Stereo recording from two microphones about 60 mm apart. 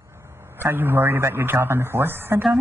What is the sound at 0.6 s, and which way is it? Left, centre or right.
A man's voice, right.